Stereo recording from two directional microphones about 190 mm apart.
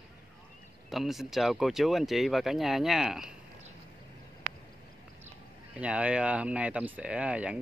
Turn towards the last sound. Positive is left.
turn(degrees=-5)  # may be behind; listen again after turning